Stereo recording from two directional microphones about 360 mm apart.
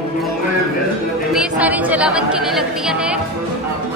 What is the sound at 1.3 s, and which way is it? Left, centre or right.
Speech, centre.